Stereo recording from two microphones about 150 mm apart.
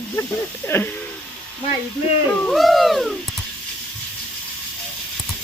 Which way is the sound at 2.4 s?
Centre (ahead or behind).